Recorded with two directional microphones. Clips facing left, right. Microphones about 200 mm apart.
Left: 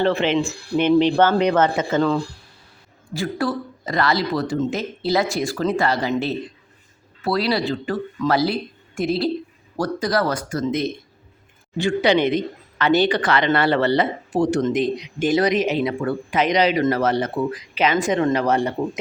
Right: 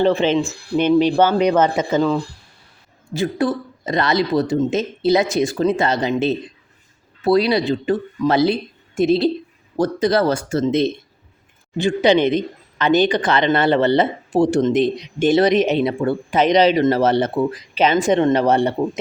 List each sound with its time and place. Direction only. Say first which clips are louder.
0.0 s speech: right 3 dB; 15° right (ahead or behind)
3.1 s speech: right 4 dB; 20° right (ahead or behind)